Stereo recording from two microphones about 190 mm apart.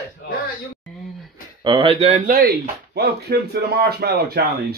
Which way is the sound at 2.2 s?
50° right (ahead or behind).